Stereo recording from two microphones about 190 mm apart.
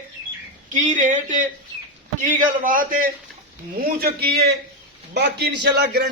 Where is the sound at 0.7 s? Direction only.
40° right (ahead or behind).